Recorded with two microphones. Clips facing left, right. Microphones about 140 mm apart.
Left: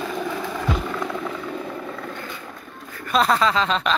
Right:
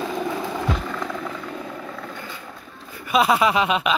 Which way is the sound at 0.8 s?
Centre (ahead or behind).